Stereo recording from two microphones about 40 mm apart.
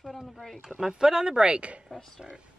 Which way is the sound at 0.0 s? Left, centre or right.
Centre.